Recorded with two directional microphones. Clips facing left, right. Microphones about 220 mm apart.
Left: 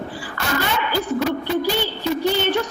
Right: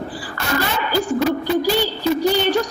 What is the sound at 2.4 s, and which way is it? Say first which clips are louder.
Speech: right 2 dB; 35° right (ahead or behind).